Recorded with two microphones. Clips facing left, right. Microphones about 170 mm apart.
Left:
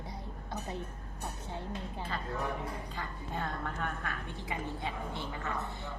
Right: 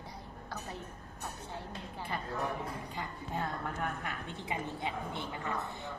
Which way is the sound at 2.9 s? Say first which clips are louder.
Right 1 dB; 15° right (ahead or behind).